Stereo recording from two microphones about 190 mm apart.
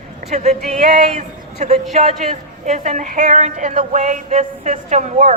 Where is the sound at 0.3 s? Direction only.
35° right (ahead or behind).